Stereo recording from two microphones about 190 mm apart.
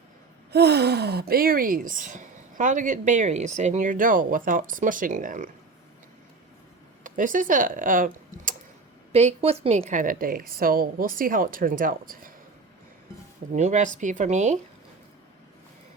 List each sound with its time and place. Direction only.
0.5 s speech: 60° right (ahead or behind)
7.0 s speech: 45° right (ahead or behind)
9.1 s speech: 35° right (ahead or behind)
13.5 s speech: 40° right (ahead or behind)